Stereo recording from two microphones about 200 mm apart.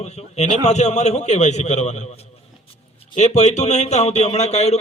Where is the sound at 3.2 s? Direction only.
35° left (ahead or behind).